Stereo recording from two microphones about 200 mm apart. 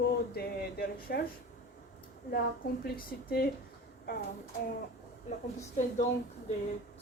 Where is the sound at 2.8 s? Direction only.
50° left (ahead or behind).